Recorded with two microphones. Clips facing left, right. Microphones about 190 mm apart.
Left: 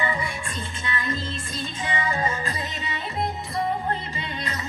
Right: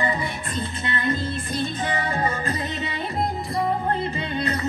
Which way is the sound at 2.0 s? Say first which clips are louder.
Left 1 dB; 55° right (ahead or behind).